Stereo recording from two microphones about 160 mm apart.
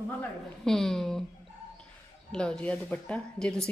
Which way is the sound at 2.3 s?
5° left (ahead or behind).